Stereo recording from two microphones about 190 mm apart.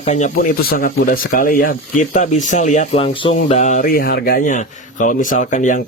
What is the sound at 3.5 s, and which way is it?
Speech, 40° left (ahead or behind).